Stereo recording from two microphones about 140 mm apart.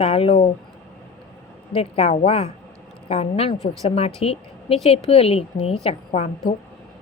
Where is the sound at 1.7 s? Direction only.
45° left (ahead or behind).